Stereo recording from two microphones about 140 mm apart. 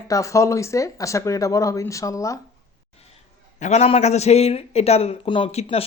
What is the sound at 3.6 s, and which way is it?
Speech, 55° left (ahead or behind).